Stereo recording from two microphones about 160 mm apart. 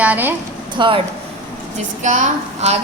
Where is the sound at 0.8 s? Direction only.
35° right (ahead or behind).